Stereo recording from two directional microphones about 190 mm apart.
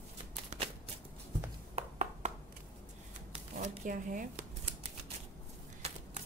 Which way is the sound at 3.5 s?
45° right (ahead or behind).